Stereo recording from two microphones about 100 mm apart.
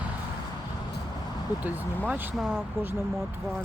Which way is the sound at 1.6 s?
15° right (ahead or behind).